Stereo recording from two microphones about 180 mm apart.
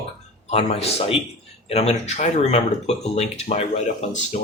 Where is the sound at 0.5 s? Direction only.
35° left (ahead or behind).